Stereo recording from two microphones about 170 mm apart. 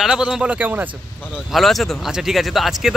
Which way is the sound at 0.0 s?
5° right (ahead or behind).